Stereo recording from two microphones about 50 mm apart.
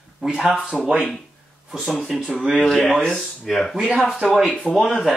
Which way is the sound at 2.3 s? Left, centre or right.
Centre.